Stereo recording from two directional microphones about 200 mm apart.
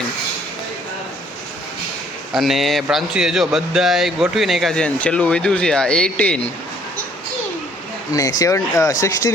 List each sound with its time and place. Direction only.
2.3 s speech: centre (ahead or behind)
8.1 s speech: 15° left (ahead or behind)